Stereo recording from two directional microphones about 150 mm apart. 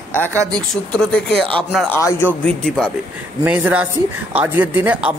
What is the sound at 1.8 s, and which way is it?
A man's voice, 15° left (ahead or behind).